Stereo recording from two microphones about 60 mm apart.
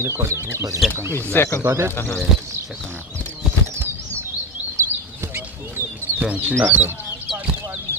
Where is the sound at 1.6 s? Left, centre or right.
Right.